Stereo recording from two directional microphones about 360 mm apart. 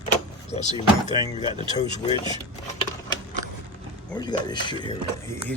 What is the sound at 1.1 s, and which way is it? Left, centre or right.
Speech, centre.